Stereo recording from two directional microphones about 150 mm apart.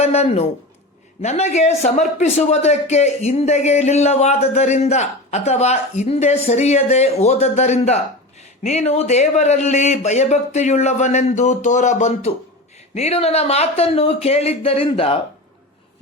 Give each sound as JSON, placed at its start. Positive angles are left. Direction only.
{"t": 0.0, "sound": "a man's voice", "side_deg": 45}